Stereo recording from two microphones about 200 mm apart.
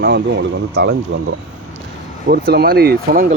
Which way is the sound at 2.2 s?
50° right (ahead or behind).